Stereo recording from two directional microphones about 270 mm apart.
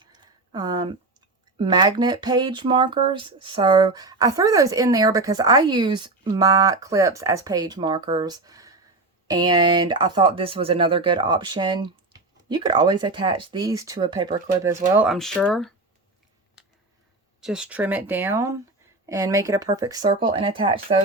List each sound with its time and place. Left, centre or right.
0.0 s a sound: centre
1.5 s speech: centre
17.4 s speech: centre